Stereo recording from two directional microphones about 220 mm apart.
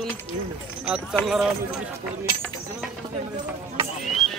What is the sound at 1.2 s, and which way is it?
Speech, centre (ahead or behind).